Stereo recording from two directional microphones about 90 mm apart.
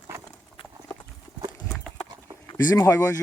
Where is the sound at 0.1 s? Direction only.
25° right (ahead or behind).